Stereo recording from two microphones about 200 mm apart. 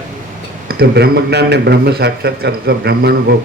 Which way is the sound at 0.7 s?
50° right (ahead or behind).